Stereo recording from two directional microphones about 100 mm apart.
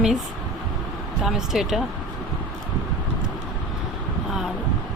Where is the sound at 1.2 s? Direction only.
5° right (ahead or behind).